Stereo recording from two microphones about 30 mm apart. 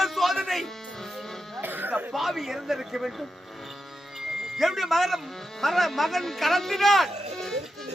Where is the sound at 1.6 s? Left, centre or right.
Right.